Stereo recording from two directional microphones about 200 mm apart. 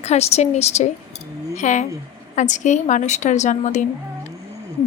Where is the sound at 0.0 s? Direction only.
30° left (ahead or behind).